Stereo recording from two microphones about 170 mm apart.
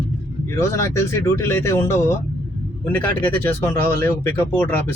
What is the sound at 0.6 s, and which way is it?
Speech, 15° left (ahead or behind).